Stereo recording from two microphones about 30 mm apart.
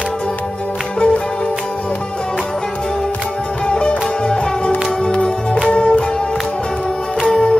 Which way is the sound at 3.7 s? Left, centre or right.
Left.